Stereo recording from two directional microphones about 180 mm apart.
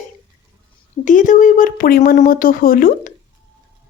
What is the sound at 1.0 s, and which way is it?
Speech, 45° left (ahead or behind).